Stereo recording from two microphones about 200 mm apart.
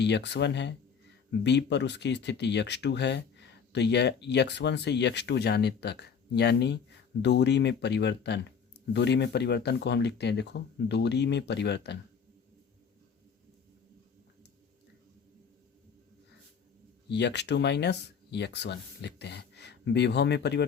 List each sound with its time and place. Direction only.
0.0 s speech: 60° left (ahead or behind)
17.1 s speech: 60° left (ahead or behind)